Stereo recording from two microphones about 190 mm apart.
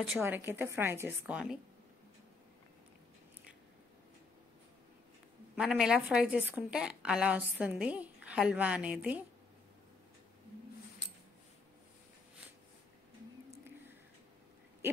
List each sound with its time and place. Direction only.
0.0 s a woman's voice: 10° right (ahead or behind)
5.6 s a woman's voice: 5° right (ahead or behind)